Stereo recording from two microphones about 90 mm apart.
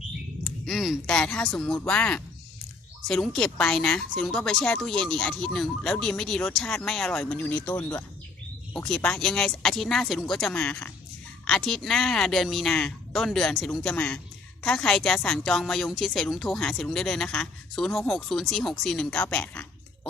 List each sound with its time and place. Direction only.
0.6 s a sound: centre (ahead or behind)
1.0 s speech: 10° left (ahead or behind)
8.7 s a woman's voice: 10° left (ahead or behind)
13.9 s a woman's voice: 15° left (ahead or behind)